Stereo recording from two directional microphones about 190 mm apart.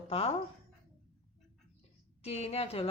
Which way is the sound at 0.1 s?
30° left (ahead or behind).